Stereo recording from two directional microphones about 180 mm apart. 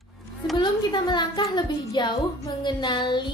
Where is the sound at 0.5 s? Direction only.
25° left (ahead or behind).